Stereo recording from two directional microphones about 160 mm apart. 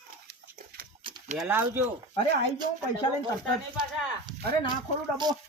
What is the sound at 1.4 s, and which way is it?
Speech, 15° right (ahead or behind).